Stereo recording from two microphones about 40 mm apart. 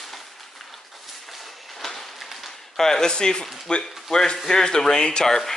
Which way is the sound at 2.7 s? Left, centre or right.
Centre.